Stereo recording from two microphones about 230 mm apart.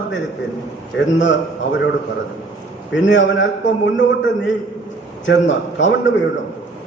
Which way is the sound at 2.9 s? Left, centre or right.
Left.